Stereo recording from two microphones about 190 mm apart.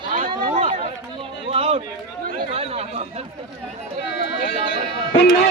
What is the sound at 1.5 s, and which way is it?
Run, 30° right (ahead or behind).